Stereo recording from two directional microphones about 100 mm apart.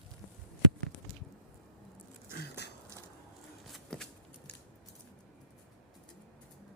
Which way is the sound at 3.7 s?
5° left (ahead or behind).